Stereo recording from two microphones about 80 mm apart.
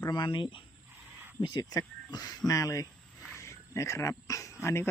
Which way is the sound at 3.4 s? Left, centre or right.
Left.